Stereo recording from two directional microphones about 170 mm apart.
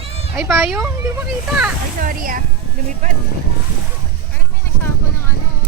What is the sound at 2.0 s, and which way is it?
Speech, 55° right (ahead or behind).